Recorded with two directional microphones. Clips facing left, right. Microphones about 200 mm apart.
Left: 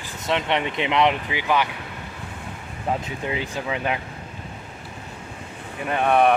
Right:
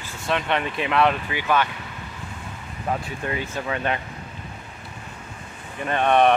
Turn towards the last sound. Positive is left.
turn(degrees=5)  # may be behind; listen again after turning